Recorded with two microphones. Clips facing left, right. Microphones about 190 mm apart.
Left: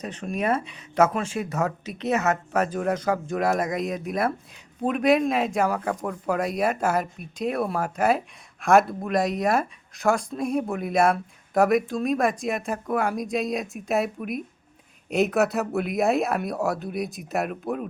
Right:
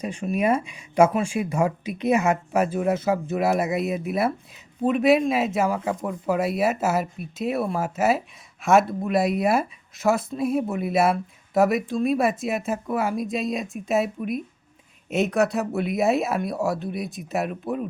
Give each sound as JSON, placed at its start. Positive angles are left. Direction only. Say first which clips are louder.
{"t": 0.0, "sound": "speech", "louder": "right 4 dB", "side_deg": -10}